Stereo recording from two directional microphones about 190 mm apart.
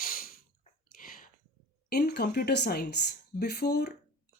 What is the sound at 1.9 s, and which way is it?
Speech, 60° left (ahead or behind).